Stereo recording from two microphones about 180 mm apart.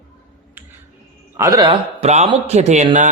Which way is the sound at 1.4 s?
20° right (ahead or behind).